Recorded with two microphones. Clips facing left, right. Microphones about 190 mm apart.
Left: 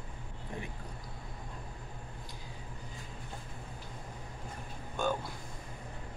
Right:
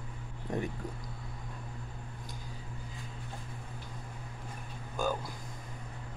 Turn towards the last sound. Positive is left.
turn(degrees=0)  # may be behind; listen again after turning